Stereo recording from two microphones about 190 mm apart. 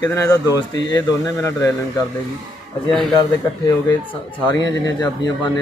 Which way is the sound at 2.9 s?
Centre (ahead or behind).